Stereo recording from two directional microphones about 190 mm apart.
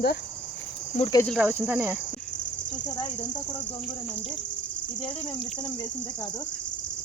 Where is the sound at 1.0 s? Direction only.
20° left (ahead or behind).